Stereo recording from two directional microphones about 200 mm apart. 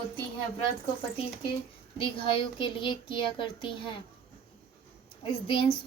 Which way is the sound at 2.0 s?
25° left (ahead or behind).